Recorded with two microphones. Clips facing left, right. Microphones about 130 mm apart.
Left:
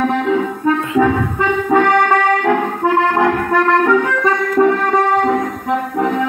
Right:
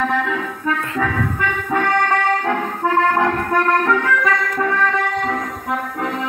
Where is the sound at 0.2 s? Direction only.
25° left (ahead or behind).